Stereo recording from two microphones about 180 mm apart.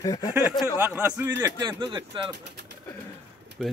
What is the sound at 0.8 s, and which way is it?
Speech, 10° right (ahead or behind).